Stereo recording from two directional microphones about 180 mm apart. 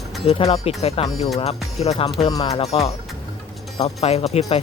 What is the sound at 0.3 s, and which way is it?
Speech, 35° left (ahead or behind).